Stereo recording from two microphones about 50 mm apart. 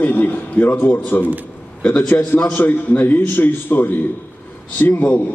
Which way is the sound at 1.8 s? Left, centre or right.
Centre.